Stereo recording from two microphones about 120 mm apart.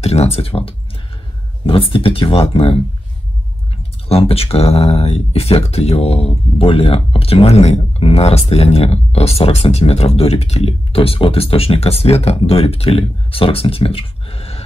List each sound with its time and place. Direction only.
0.0 s speech: 60° left (ahead or behind)